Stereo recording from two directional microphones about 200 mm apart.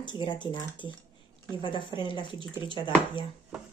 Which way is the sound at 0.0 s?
25° left (ahead or behind).